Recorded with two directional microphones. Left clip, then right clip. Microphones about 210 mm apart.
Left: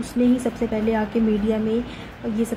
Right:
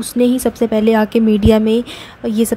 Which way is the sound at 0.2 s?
45° right (ahead or behind).